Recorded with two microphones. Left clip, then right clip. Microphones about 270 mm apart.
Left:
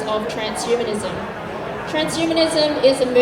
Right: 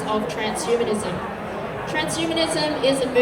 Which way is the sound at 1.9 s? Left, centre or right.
Left.